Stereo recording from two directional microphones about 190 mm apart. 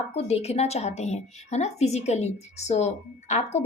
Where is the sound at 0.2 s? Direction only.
35° left (ahead or behind).